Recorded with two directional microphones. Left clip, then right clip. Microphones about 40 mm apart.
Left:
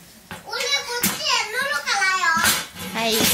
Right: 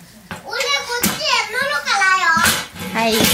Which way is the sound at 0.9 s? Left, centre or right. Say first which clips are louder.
Right 4 dB; centre.